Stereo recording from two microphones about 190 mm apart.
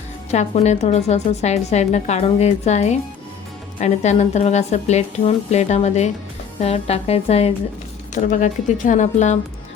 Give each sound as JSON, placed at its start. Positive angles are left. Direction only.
{"t": 0.3, "sound": "a woman's voice", "side_deg": 35}